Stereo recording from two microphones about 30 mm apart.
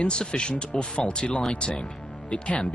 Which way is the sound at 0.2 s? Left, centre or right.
Left.